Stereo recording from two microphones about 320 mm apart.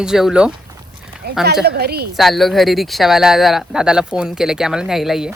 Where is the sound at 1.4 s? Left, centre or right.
Right.